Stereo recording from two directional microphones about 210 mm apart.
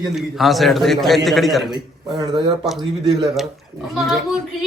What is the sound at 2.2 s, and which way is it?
Speech, 20° right (ahead or behind).